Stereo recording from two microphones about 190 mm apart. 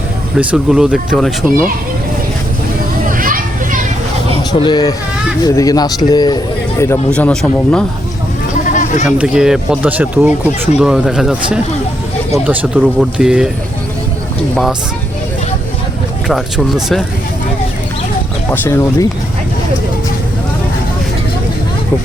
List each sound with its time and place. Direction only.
0.3 s speech: 5° right (ahead or behind)
3.1 s children playing: 45° right (ahead or behind)
4.6 s a man's voice: 20° left (ahead or behind); by 7.9 s 5° left (ahead or behind)
8.7 s a sound: 40° left (ahead or behind)
9.0 s speech: 5° right (ahead or behind)
14.5 s speech: centre (ahead or behind)
16.3 s speech: centre (ahead or behind)
18.5 s a man's voice: 10° left (ahead or behind)